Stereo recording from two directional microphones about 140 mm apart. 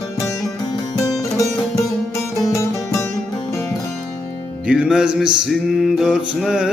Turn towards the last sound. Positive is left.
turn(degrees=-5)  # may be behind; listen again after turning